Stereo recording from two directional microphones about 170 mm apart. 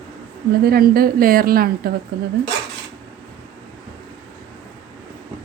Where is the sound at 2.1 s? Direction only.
70° right (ahead or behind).